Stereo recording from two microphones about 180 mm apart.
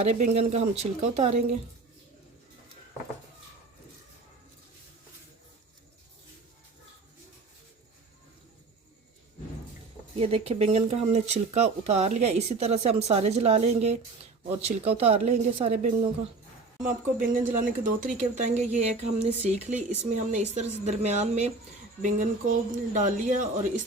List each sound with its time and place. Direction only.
0.0 s speech: 40° right (ahead or behind)
10.2 s speech: 35° right (ahead or behind)
16.8 s speech: 45° right (ahead or behind)